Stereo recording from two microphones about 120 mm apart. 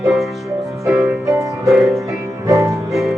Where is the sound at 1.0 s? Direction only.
25° right (ahead or behind).